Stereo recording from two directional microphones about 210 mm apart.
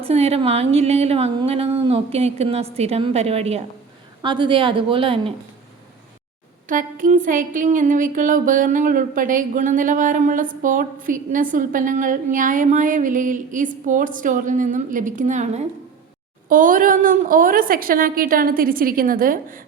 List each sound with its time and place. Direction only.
0.0 s speech: 30° right (ahead or behind)
6.7 s a woman's voice: 40° right (ahead or behind)